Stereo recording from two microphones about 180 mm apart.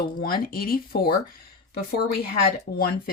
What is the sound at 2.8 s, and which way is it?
Speech, 55° left (ahead or behind).